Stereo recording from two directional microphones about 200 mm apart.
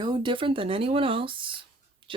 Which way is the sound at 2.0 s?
25° right (ahead or behind).